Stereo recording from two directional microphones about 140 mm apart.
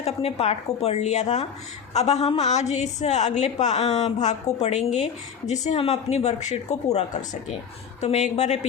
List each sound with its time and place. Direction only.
0.0 s a woman's voice: 45° left (ahead or behind)